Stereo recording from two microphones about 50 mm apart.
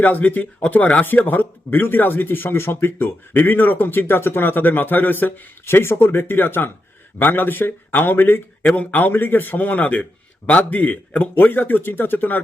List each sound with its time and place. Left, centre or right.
0.0 s a man's voice: left
1.0 s a man's voice: left
8.6 s a man's voice: left